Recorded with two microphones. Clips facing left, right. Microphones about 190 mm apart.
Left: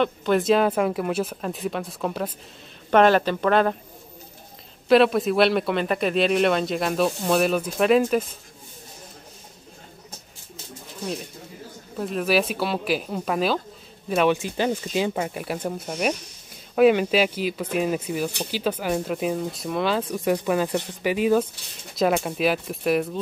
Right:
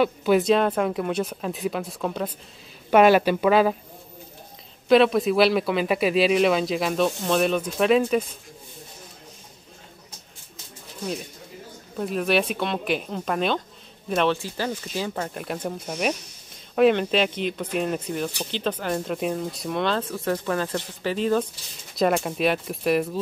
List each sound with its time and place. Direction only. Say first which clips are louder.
0.0 s speech: right 2 dB; 5° right (ahead or behind)
2.9 s speech: right 1 dB; 10° right (ahead or behind)
4.8 s speech: even; centre (ahead or behind)
12.0 s speech: even; centre (ahead or behind)